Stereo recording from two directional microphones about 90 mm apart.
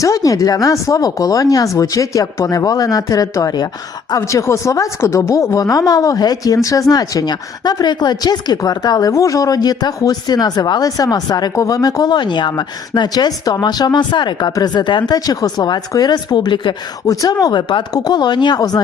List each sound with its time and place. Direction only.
0.0 s a woman's voice: 40° left (ahead or behind); by 16.7 s 60° left (ahead or behind)
17.1 s a woman's voice: 40° left (ahead or behind)